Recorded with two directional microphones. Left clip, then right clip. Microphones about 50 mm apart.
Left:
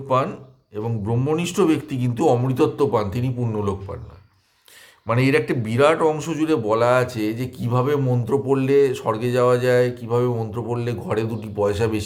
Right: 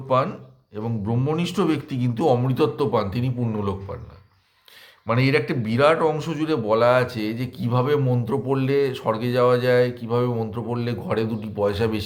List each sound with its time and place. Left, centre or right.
0.1 s a man's voice: left
5.0 s a man's voice: left